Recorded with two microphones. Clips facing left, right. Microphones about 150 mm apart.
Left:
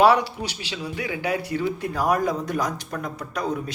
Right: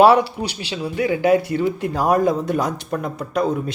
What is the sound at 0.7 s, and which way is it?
Speech, 45° right (ahead or behind).